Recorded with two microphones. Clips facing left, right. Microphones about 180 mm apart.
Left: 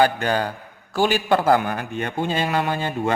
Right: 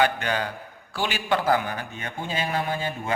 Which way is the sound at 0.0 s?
40° left (ahead or behind).